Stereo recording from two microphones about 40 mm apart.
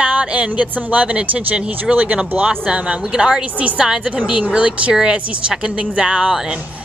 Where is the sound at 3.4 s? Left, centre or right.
Right.